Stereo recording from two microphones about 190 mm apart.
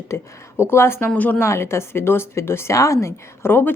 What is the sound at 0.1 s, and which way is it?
A woman's voice, 15° left (ahead or behind).